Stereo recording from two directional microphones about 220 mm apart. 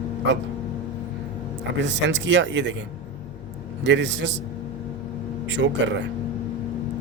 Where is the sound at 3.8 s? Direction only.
55° right (ahead or behind).